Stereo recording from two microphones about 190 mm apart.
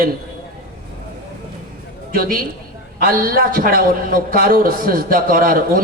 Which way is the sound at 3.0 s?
50° right (ahead or behind).